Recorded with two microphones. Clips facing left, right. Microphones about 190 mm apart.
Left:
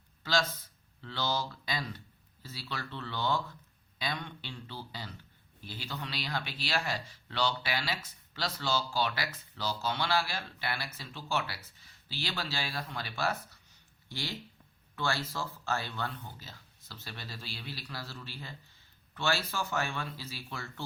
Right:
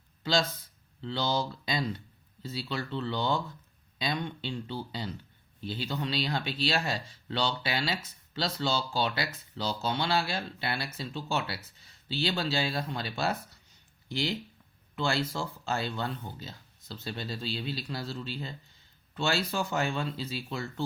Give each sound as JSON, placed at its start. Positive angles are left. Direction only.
{"t": 1.0, "sound": "speech", "side_deg": -20}
{"t": 15.0, "sound": "speech", "side_deg": -20}